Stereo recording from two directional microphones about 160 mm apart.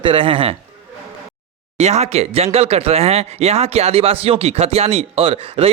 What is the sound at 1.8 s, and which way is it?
Speech, 45° right (ahead or behind).